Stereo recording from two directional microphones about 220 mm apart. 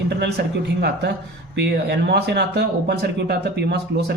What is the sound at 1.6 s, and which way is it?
Speech, 50° right (ahead or behind).